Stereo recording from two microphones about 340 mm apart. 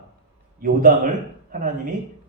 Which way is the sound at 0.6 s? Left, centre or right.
Right.